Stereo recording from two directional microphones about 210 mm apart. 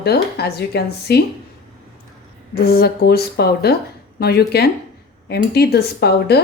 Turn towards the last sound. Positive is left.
turn(degrees=50)  # may be behind; listen again after turning